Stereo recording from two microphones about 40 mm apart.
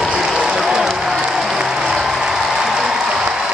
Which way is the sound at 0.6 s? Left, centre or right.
Centre.